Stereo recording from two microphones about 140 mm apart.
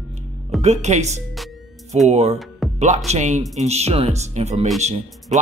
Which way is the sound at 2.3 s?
Centre (ahead or behind).